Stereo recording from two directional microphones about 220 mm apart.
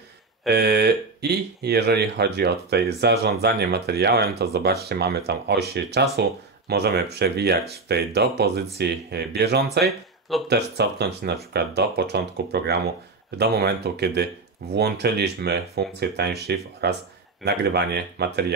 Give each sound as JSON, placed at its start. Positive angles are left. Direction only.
{"t": 0.5, "sound": "speech", "side_deg": -50}